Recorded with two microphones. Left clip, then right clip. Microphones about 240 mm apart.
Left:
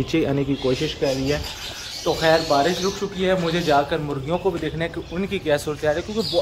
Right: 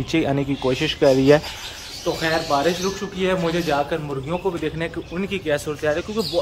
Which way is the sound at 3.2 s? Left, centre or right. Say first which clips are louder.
Even; centre.